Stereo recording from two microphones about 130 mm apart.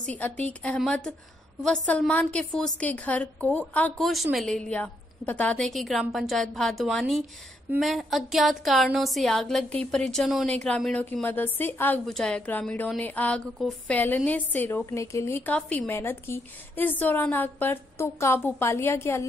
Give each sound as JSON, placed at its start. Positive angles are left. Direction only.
{"t": 0.0, "sound": "a woman's voice", "side_deg": 10}
{"t": 4.1, "sound": "a woman's voice", "side_deg": 0}